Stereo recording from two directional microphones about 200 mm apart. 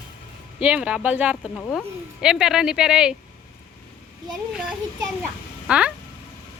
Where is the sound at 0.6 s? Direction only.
5° right (ahead or behind).